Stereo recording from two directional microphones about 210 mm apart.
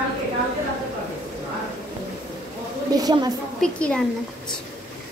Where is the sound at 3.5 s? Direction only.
5° left (ahead or behind).